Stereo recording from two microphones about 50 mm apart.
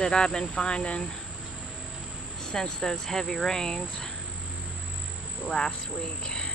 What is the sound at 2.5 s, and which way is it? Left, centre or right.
Speech, centre.